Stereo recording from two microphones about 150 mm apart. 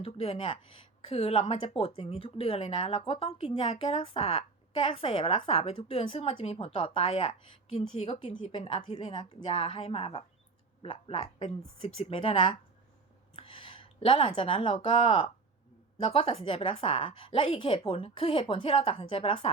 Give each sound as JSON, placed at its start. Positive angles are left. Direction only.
{"t": 0.0, "sound": "a woman's voice", "side_deg": 40}
{"t": 8.4, "sound": "a woman's voice", "side_deg": 35}
{"t": 13.3, "sound": "a sound", "side_deg": 35}
{"t": 14.8, "sound": "a woman's voice", "side_deg": 35}